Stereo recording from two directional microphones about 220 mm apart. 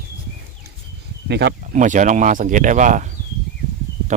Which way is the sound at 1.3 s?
50° right (ahead or behind).